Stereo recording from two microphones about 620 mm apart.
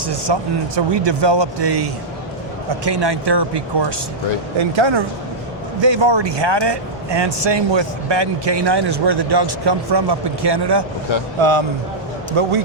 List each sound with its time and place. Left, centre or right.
0.3 s speech: right
11.3 s speech: right